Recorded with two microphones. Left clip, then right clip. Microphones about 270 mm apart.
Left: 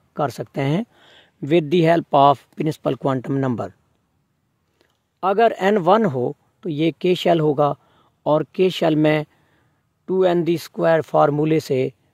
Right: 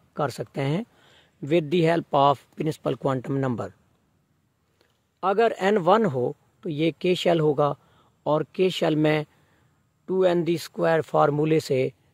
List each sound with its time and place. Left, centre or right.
0.1 s speech: left
4.7 s speech: left